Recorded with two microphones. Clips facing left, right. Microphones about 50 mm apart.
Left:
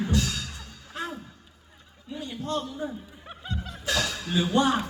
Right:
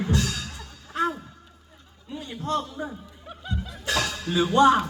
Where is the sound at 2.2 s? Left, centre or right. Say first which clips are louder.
Right 3 dB; right.